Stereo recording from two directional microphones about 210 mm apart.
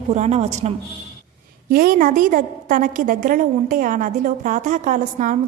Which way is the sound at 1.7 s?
45° right (ahead or behind).